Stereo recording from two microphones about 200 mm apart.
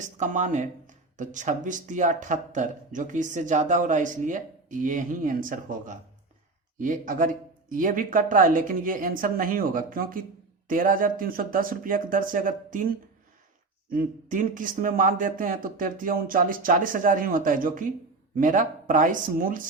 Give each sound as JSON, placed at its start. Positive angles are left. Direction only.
{"t": 0.0, "sound": "speech", "side_deg": -40}